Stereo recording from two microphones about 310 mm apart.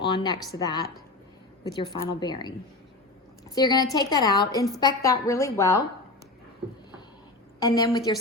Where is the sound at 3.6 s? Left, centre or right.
Centre.